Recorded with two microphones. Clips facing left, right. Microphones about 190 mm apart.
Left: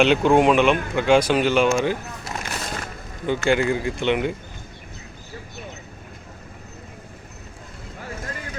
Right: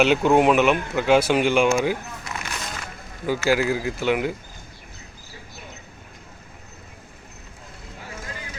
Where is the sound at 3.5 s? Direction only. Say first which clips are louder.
Left 1 dB; 5° right (ahead or behind).